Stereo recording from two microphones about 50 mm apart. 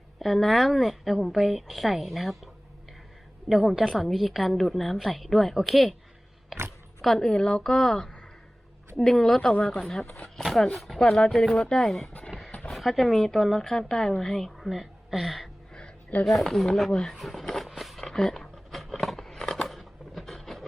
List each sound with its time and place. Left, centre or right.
0.2 s a woman's voice: centre
3.5 s a woman's voice: centre
7.0 s a woman's voice: centre
12.5 s a sound: centre
12.7 s a woman's voice: centre
17.7 s a sound: centre